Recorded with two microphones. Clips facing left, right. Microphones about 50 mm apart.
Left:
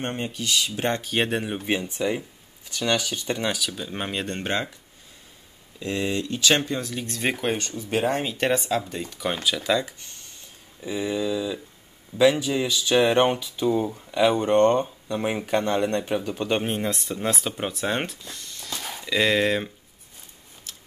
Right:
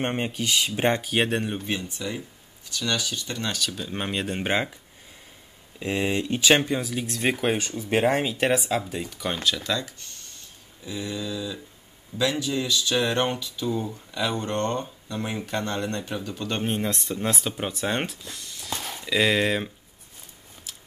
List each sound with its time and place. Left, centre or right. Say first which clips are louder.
0.0 s speech: right 2 dB; right
1.0 s speech: even; centre
1.7 s speech: left 5 dB; left
3.5 s speech: even; centre
4.4 s speech: right 3 dB; centre
5.8 s speech: right 1 dB; right
8.2 s speech: right 1 dB; centre
16.6 s speech: even; centre
20.7 s a sound: even; centre